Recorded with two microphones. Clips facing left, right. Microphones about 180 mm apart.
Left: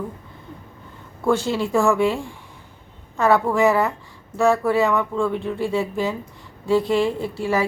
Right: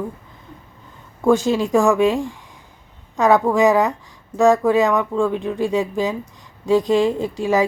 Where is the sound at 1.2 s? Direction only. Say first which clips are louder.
Right 4 dB; 15° right (ahead or behind).